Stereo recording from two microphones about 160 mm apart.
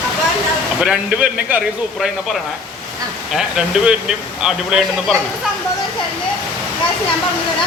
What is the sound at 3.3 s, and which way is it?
Speech, 5° right (ahead or behind).